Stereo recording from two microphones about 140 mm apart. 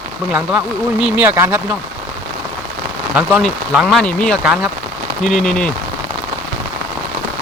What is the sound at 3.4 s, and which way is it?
Speech, centre (ahead or behind).